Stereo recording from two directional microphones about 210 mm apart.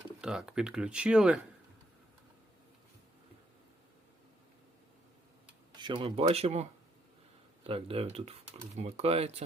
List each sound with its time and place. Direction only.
0.2 s speech: 5° right (ahead or behind)
5.7 s speech: 20° right (ahead or behind)
7.7 s speech: 25° right (ahead or behind)